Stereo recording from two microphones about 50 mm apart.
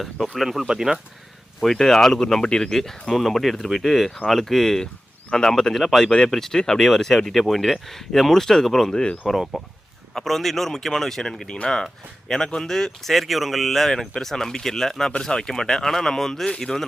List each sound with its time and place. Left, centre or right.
0.0 s speech: centre
1.6 s speech: centre
6.1 s speech: centre